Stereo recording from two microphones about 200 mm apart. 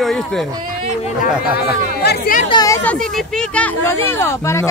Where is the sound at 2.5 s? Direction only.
20° left (ahead or behind).